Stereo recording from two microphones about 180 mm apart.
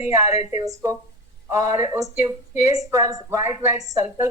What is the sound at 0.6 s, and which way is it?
Speech, 20° right (ahead or behind).